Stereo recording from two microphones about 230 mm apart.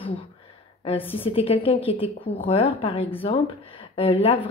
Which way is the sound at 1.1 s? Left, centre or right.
Left.